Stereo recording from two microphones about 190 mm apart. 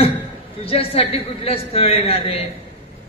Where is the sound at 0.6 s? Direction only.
30° left (ahead or behind).